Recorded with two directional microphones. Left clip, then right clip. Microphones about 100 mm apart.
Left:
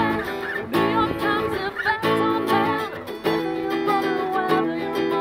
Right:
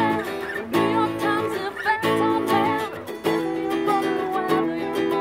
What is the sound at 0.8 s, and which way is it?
Music, 5° right (ahead or behind).